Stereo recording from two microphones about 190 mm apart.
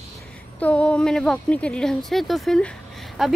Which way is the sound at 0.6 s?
5° left (ahead or behind).